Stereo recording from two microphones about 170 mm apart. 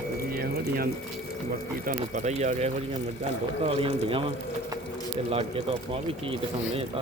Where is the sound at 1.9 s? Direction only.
45° right (ahead or behind).